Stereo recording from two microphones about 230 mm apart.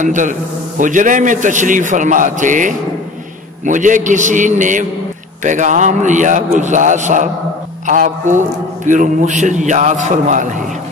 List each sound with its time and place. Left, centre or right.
0.0 s a man's voice: right